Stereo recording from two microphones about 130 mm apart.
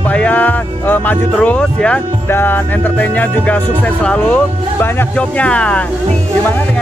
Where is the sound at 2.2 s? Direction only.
15° left (ahead or behind).